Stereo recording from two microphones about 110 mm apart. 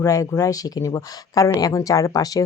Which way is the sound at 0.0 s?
30° left (ahead or behind).